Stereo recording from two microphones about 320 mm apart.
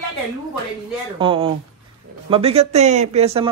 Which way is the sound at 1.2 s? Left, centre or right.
Centre.